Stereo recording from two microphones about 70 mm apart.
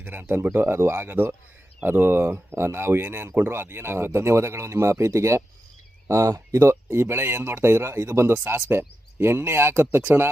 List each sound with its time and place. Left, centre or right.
0.0 s speech: right